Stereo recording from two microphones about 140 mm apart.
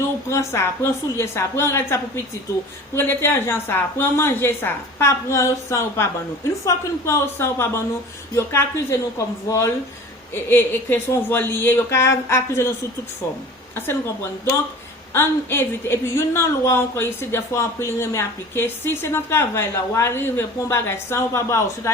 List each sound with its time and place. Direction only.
0.3 s a woman's voice: 20° left (ahead or behind)
15.1 s a woman's voice: 15° left (ahead or behind)